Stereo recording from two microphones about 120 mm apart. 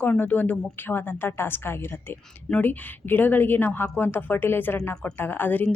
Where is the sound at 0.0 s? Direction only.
15° left (ahead or behind).